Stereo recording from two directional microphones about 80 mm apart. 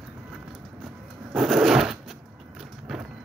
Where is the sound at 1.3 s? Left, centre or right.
Centre.